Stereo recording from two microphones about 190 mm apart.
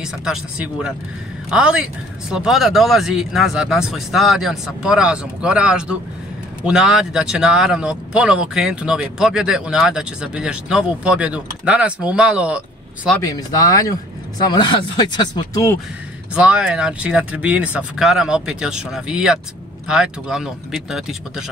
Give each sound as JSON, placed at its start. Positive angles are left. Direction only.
{"t": 0.0, "sound": "speech", "side_deg": -5}
{"t": 13.2, "sound": "speech", "side_deg": 20}
{"t": 16.3, "sound": "speech", "side_deg": -5}